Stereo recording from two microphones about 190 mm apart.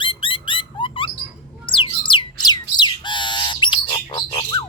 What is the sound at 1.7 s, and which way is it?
Squawk, 25° left (ahead or behind).